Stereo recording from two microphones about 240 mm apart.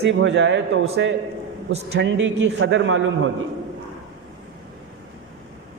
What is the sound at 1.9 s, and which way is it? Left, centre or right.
A man's voice, right.